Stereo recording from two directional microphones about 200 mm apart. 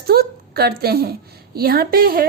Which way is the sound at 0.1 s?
50° right (ahead or behind).